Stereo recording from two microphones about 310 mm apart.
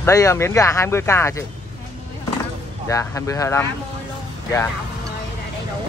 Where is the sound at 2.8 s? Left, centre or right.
Centre.